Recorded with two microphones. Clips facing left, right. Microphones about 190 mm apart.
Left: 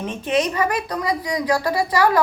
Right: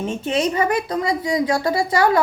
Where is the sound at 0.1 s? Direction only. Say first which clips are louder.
Left 2 dB; 25° right (ahead or behind).